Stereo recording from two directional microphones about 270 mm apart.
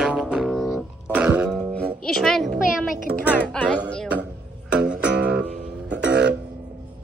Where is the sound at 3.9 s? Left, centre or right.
Centre.